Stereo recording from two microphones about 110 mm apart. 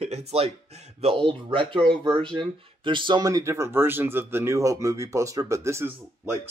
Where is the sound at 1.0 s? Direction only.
50° right (ahead or behind).